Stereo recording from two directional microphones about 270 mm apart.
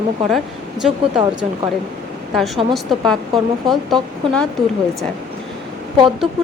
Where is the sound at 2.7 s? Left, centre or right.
Centre.